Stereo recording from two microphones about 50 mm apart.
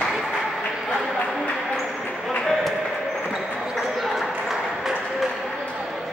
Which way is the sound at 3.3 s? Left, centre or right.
Centre.